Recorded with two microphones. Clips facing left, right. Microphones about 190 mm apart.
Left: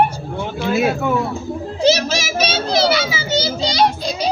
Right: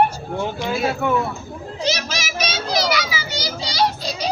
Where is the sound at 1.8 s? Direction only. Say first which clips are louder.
Left 9 dB; 30° left (ahead or behind).